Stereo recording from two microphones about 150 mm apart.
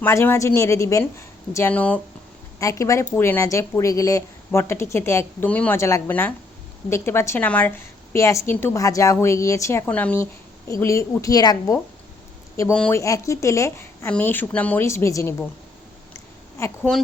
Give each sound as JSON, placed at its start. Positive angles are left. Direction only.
{"t": 0.0, "sound": "a woman's voice", "side_deg": 15}
{"t": 2.6, "sound": "a woman's voice", "side_deg": 20}
{"t": 16.1, "sound": "a sound", "side_deg": 20}